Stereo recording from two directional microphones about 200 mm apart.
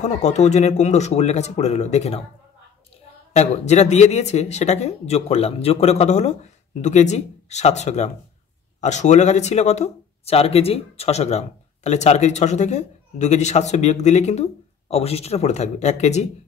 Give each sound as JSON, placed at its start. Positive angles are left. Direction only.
{"t": 0.0, "sound": "speech", "side_deg": 35}
{"t": 3.3, "sound": "speech", "side_deg": 35}